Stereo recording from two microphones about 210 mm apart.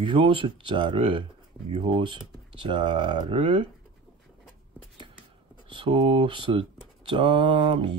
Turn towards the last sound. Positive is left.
turn(degrees=-25)  # may be behind; listen again after turning